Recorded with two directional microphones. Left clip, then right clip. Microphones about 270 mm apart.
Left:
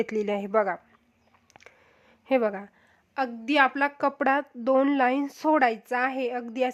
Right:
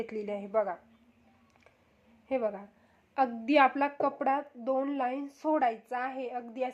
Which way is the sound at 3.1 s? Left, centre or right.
Centre.